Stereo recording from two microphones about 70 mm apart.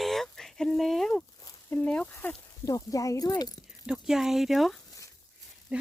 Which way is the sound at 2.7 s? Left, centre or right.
Left.